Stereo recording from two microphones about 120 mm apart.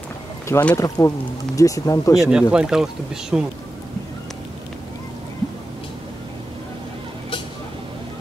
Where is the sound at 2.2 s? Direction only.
5° right (ahead or behind).